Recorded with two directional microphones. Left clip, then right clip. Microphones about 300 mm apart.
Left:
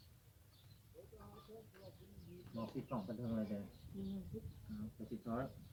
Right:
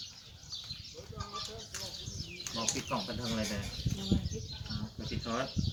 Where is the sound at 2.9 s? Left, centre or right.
Centre.